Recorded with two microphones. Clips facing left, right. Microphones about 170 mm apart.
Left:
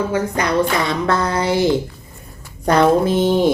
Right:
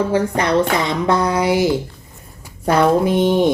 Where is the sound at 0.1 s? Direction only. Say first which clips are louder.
Right 2 dB; 30° right (ahead or behind).